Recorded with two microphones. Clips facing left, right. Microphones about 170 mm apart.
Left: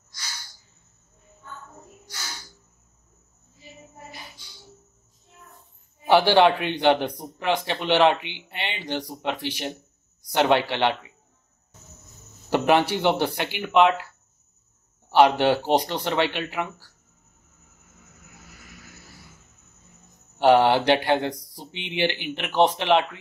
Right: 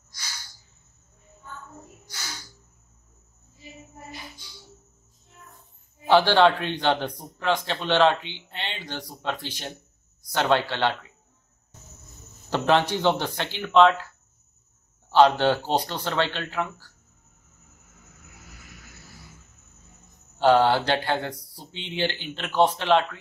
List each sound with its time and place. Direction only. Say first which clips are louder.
6.0 s a man's voice: left 1 dB; 15° left (ahead or behind)
12.4 s a man's voice: left 2 dB; 15° left (ahead or behind)
15.0 s a man's voice: left 1 dB; 15° left (ahead or behind)
20.3 s a man's voice: left 2 dB; 15° left (ahead or behind)